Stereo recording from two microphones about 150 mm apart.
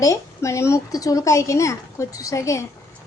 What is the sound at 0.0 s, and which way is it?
A woman's voice, 20° left (ahead or behind).